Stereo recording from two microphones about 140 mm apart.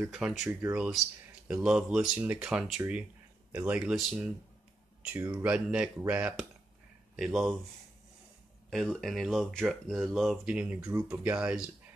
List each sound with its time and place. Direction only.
0.1 s speech: 5° right (ahead or behind)
0.5 s speech: 20° right (ahead or behind)
0.7 s speech: 5° right (ahead or behind)
5.0 s speech: 15° right (ahead or behind); by 7.5 s centre (ahead or behind)
8.6 s speech: 5° left (ahead or behind)